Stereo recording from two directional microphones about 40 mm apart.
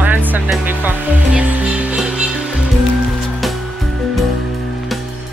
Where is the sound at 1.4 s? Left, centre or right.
Right.